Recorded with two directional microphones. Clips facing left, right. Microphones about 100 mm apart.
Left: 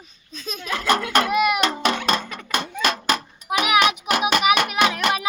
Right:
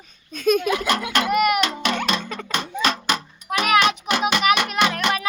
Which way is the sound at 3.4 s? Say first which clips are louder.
Even; 10° left (ahead or behind).